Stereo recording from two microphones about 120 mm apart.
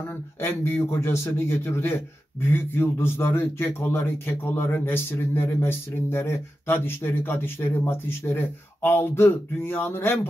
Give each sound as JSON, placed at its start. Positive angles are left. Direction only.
{"t": 0.4, "sound": "a man's voice", "side_deg": 20}